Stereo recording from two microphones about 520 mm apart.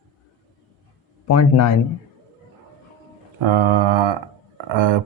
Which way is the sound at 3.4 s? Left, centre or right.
Right.